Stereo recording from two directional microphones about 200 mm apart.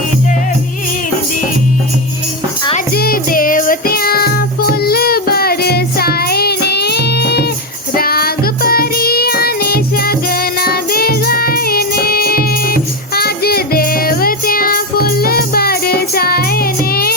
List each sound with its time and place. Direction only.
2.9 s music: 50° left (ahead or behind)